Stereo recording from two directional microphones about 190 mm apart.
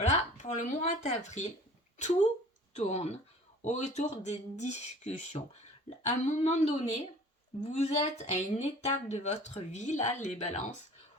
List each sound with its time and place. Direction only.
0.0 s speech: 40° left (ahead or behind)
2.7 s speech: 35° left (ahead or behind)